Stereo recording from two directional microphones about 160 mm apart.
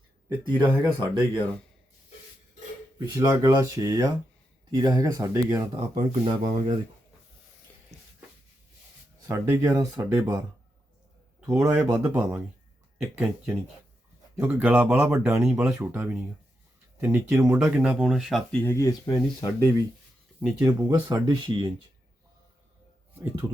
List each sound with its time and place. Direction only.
0.6 s speech: 15° right (ahead or behind)
3.0 s speech: 20° right (ahead or behind)
6.1 s speech: 35° right (ahead or behind)
7.9 s a sound: 40° right (ahead or behind)
9.2 s speech: 20° right (ahead or behind)
11.4 s speech: 15° right (ahead or behind)
14.3 s speech: 15° right (ahead or behind)
15.4 s speech: 5° right (ahead or behind)
18.6 s speech: 20° left (ahead or behind)
20.4 s speech: 5° right (ahead or behind)
20.7 s speech: 25° right (ahead or behind)